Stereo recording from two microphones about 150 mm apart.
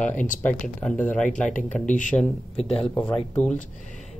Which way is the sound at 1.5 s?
60° left (ahead or behind).